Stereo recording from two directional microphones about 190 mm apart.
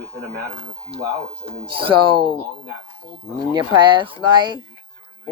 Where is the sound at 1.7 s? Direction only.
25° right (ahead or behind).